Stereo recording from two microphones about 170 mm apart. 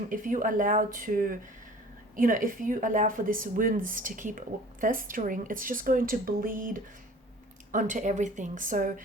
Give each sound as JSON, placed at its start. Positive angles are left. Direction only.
{"t": 0.1, "sound": "speech", "side_deg": -50}